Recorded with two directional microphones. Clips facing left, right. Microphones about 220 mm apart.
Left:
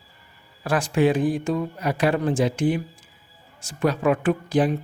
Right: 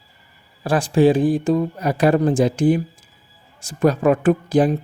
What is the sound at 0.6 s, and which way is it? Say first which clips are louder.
Speech: right 5 dB; 30° right (ahead or behind).